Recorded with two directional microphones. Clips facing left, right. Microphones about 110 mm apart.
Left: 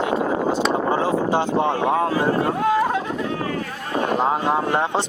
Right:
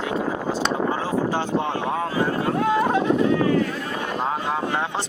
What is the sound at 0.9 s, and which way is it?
Speech, 25° left (ahead or behind).